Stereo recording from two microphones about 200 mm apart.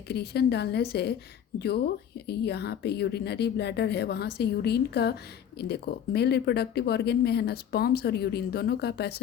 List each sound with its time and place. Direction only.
0.1 s a woman's voice: 55° left (ahead or behind)
2.2 s a woman's voice: 55° left (ahead or behind)